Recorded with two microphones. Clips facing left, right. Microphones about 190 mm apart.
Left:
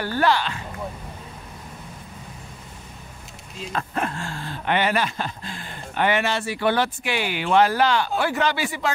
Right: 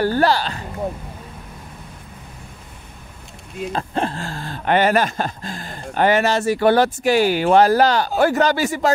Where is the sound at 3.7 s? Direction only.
30° right (ahead or behind).